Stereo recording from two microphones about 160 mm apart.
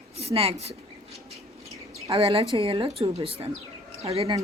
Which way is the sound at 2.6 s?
35° right (ahead or behind).